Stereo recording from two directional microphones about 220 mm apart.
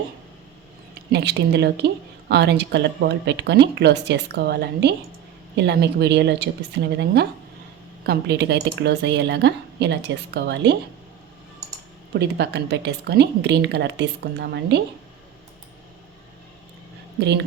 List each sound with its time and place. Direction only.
1.1 s speech: 50° right (ahead or behind)
12.2 s speech: 50° right (ahead or behind)
17.2 s speech: 50° right (ahead or behind)